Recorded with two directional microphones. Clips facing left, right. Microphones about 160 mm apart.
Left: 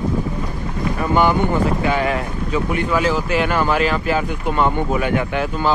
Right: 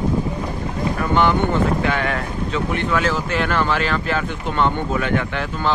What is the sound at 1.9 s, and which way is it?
Speech, 5° left (ahead or behind).